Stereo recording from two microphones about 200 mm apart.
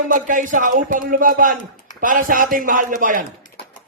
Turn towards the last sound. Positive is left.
turn(degrees=-40)  # may be behind; listen again after turning